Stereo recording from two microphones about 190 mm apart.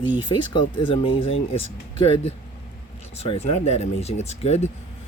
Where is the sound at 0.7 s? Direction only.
25° left (ahead or behind).